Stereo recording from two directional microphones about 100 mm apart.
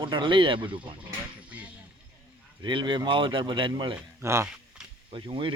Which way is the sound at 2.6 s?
50° right (ahead or behind).